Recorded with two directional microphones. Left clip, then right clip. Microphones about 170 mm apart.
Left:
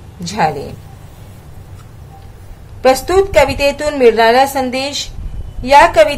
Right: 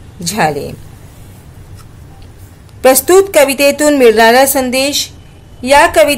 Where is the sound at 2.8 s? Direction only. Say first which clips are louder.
Right 4 dB; 45° right (ahead or behind).